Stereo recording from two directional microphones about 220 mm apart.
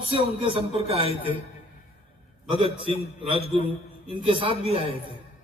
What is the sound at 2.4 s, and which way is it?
A man's voice, 25° right (ahead or behind).